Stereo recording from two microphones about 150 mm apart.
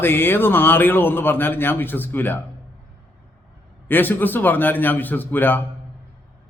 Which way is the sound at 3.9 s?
15° left (ahead or behind).